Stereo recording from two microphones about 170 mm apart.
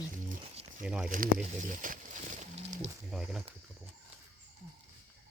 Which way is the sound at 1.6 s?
50° right (ahead or behind).